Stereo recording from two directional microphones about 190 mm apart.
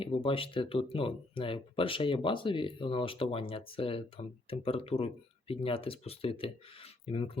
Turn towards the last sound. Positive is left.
turn(degrees=30)  # may be behind; listen again after turning